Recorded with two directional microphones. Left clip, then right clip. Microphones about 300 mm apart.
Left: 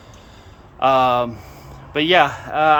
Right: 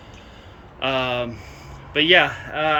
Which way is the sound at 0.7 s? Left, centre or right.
Centre.